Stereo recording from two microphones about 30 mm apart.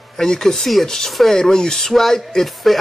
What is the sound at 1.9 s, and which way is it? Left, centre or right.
Speech, centre.